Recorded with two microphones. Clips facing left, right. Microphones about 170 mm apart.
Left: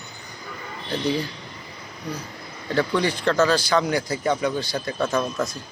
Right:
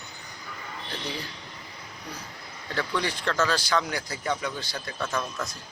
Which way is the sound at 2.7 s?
25° left (ahead or behind).